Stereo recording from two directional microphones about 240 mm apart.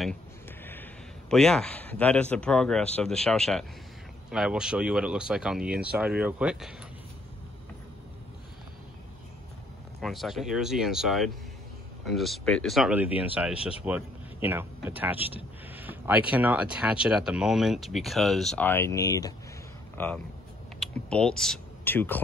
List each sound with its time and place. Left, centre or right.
1.3 s speech: centre
9.9 s speech: centre
20.8 s speech: centre